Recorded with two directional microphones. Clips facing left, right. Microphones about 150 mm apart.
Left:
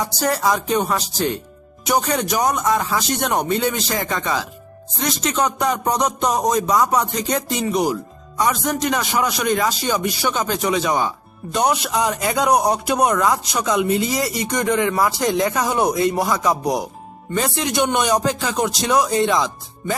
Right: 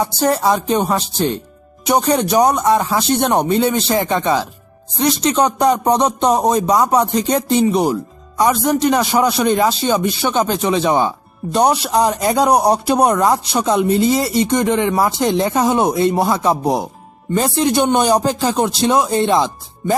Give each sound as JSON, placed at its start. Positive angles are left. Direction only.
{"t": 0.0, "sound": "a man's voice", "side_deg": -30}